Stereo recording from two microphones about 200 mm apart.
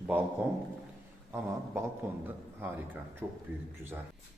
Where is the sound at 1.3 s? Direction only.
10° right (ahead or behind).